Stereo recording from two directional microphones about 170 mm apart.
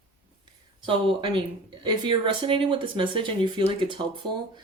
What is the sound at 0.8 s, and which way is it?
Speech, 30° right (ahead or behind).